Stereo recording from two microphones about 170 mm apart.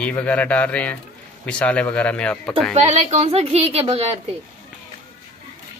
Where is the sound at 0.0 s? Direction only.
10° left (ahead or behind).